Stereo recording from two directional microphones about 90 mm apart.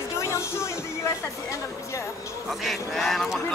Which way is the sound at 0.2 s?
30° left (ahead or behind).